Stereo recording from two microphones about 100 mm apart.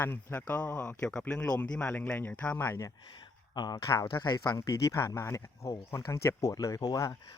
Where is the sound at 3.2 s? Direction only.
45° left (ahead or behind).